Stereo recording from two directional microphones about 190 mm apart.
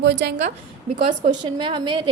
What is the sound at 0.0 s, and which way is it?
Speech, 65° right (ahead or behind).